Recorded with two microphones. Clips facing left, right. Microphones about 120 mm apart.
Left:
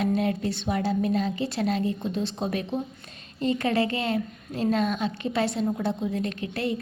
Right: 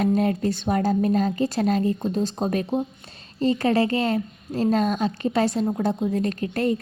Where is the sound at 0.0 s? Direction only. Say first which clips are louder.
Right 4 dB; 40° right (ahead or behind).